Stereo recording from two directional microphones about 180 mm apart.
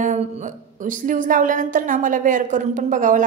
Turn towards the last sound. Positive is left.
turn(degrees=-45)  # may be behind; listen again after turning